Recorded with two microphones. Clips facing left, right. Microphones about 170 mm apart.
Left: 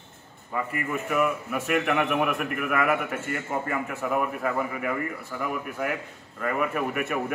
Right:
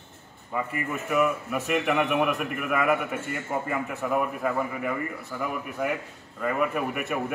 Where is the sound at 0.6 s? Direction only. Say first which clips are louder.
Left 1 dB; centre (ahead or behind).